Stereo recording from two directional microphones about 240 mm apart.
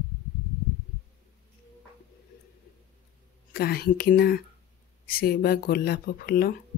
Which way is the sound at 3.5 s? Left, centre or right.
Left.